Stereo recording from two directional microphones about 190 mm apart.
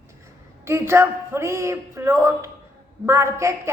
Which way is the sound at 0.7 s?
15° right (ahead or behind).